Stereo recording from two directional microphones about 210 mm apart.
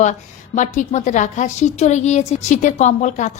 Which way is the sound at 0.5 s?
35° left (ahead or behind).